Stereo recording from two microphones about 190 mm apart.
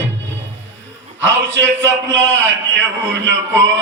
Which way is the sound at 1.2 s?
70° right (ahead or behind).